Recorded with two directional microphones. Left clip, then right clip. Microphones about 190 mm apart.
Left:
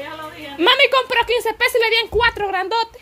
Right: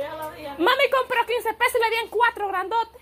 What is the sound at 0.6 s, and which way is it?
Speech, 30° left (ahead or behind).